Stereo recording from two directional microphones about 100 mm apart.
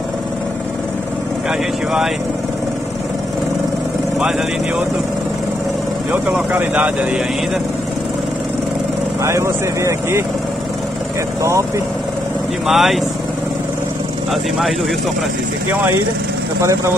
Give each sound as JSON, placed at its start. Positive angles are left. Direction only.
{"t": 6.1, "sound": "speech", "side_deg": -15}
{"t": 9.2, "sound": "speech", "side_deg": -30}
{"t": 12.6, "sound": "speech", "side_deg": 0}